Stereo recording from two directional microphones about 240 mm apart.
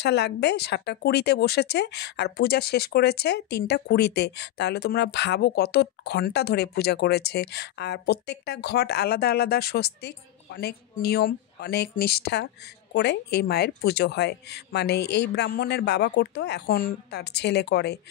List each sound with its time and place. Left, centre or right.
0.0 s a woman's voice: left